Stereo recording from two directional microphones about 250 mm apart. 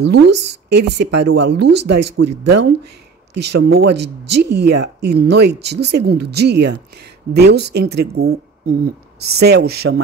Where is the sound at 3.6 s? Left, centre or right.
Right.